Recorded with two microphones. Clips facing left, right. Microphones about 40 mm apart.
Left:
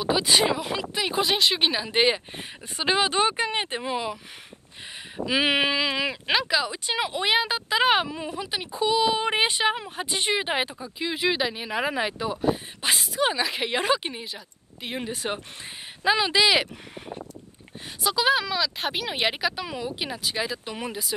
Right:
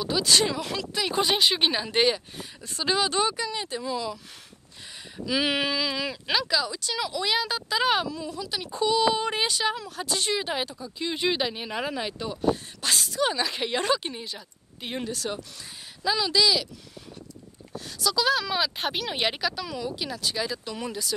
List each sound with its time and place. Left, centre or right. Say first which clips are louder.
0.0 s speech: left 2 dB; left
1.2 s speech: even; centre
2.0 s speech: left 2 dB; left
7.4 s speech: left 3 dB; left
8.7 s speech: even; centre
11.1 s speech: left 1 dB; centre
11.8 s speech: left 5 dB; left
15.0 s speech: left 2 dB; left
17.7 s speech: left 1 dB; left
18.8 s speech: left 1 dB; centre; by 21.1 s left